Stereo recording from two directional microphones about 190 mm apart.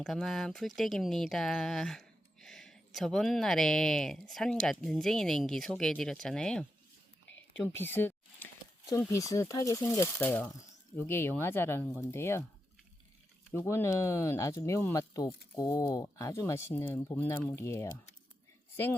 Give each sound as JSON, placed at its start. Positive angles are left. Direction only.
{"t": 0.0, "sound": "speech", "side_deg": 0}
{"t": 13.7, "sound": "speech", "side_deg": 15}